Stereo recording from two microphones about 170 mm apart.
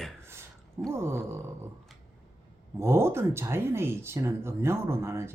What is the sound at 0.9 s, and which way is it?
Speech, 15° right (ahead or behind).